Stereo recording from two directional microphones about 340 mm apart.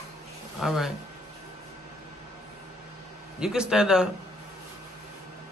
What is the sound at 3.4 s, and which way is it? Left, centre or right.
Speech, centre.